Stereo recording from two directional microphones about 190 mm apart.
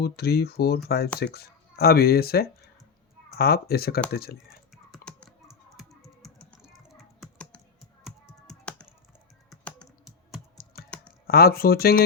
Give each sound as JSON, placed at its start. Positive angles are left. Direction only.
{"t": 0.0, "sound": "speech", "side_deg": 55}
{"t": 4.4, "sound": "typing", "side_deg": 0}
{"t": 9.5, "sound": "computer keyboard", "side_deg": 0}
{"t": 11.3, "sound": "speech", "side_deg": 55}